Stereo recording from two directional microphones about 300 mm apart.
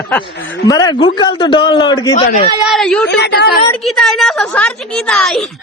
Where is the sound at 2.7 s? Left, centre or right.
Centre.